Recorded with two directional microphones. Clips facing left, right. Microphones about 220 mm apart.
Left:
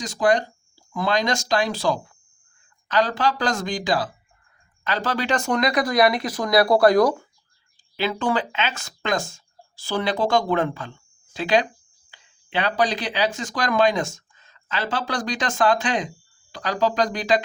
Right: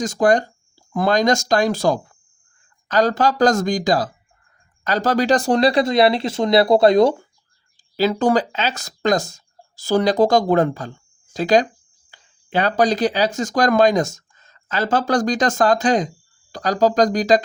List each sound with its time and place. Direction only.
0.0 s speech: 45° right (ahead or behind); by 7.2 s 25° right (ahead or behind)
7.9 s speech: 40° right (ahead or behind)